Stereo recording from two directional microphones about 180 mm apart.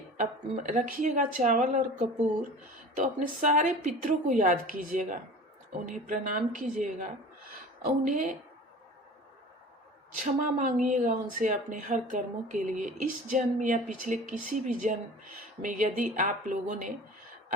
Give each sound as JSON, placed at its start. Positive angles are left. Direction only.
{"t": 0.2, "sound": "a woman's voice", "side_deg": -45}
{"t": 10.4, "sound": "a woman's voice", "side_deg": -45}